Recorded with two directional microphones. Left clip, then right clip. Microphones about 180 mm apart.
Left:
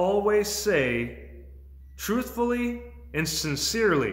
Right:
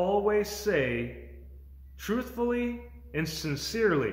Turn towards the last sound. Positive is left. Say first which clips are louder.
# left 3 dB
turn(degrees=20)  # may be behind; listen again after turning